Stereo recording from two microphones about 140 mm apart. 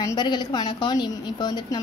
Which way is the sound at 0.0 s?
30° left (ahead or behind).